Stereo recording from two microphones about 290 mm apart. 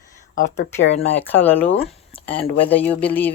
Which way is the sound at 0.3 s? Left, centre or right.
Left.